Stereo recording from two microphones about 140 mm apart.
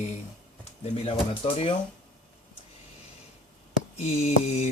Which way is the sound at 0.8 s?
40° left (ahead or behind).